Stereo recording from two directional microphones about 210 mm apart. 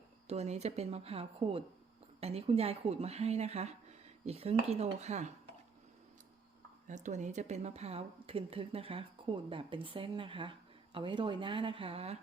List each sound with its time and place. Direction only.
0.3 s speech: 30° right (ahead or behind)
6.8 s speech: 35° right (ahead or behind)